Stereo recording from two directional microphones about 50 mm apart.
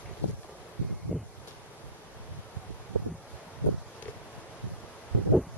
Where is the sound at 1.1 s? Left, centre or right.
Left.